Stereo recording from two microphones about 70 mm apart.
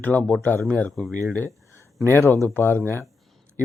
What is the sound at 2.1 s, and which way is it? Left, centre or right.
Speech, left.